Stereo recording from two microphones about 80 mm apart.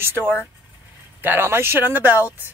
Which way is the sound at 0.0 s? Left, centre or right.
Right.